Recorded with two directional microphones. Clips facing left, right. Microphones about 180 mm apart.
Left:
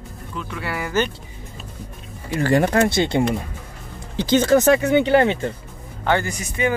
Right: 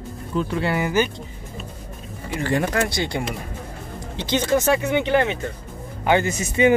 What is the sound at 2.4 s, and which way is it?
Speech, 40° left (ahead or behind).